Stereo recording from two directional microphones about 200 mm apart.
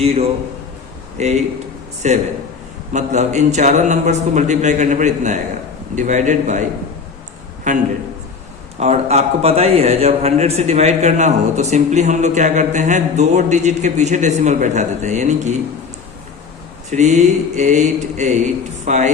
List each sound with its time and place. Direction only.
0.0 s a man's voice: 30° right (ahead or behind)
7.7 s a man's voice: 35° right (ahead or behind)
16.9 s a man's voice: 35° right (ahead or behind)